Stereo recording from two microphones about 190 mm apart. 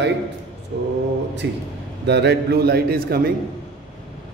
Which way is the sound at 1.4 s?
70° right (ahead or behind).